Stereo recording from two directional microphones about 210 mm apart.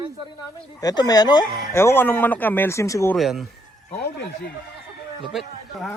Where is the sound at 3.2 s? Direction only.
Centre (ahead or behind).